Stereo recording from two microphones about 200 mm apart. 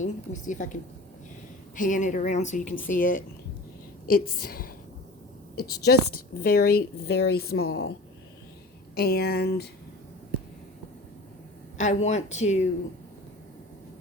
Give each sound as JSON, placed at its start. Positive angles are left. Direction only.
{"t": 0.0, "sound": "a woman's voice", "side_deg": 40}
{"t": 9.0, "sound": "a woman's voice", "side_deg": 50}
{"t": 11.8, "sound": "speech", "side_deg": 35}